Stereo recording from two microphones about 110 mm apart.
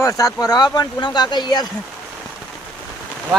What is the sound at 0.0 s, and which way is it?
Speech, 30° left (ahead or behind).